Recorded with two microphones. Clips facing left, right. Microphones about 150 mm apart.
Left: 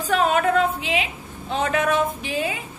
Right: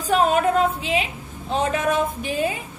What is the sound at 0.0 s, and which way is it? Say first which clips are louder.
Music: right 1 dB; 45° right (ahead or behind).